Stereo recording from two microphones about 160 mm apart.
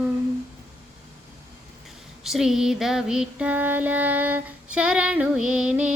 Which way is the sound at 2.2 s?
Centre (ahead or behind).